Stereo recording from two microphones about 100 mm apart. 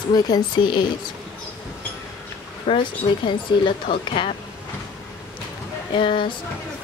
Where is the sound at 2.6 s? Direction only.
55° left (ahead or behind).